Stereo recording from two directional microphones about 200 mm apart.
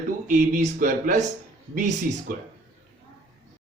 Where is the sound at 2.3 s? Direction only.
45° right (ahead or behind).